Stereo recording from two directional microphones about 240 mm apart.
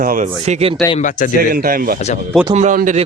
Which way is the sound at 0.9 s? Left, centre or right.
Left.